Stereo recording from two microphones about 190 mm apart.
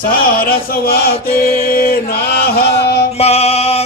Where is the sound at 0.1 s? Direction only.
50° left (ahead or behind).